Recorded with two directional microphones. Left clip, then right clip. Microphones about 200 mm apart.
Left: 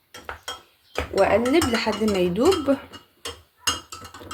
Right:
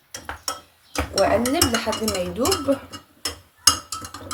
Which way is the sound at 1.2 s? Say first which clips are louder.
Left 1 dB; 50° left (ahead or behind).